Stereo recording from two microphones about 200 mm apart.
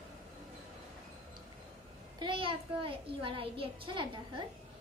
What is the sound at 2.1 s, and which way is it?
A child's voice, 25° right (ahead or behind).